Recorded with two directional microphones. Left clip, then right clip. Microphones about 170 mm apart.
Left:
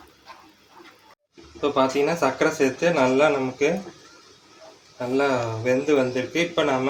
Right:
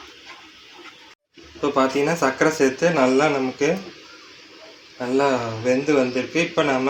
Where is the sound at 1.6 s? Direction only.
30° right (ahead or behind).